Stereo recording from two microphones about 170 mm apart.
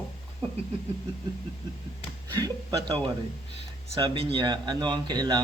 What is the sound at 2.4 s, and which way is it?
Speech, 25° right (ahead or behind).